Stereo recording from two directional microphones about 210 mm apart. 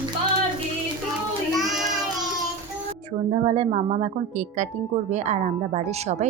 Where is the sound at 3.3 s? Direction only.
30° right (ahead or behind).